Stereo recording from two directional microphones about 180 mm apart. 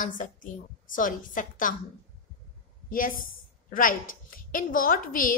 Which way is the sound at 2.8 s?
50° left (ahead or behind).